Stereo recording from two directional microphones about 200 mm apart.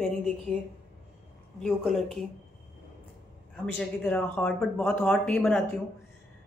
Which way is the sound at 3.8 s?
5° left (ahead or behind).